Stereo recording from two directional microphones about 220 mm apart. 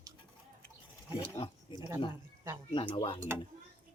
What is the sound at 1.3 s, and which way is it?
Speech, 25° left (ahead or behind).